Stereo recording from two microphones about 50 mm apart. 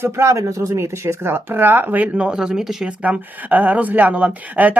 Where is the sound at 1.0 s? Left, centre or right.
Right.